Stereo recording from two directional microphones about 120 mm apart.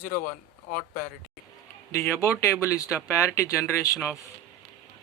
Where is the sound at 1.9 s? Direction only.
25° left (ahead or behind).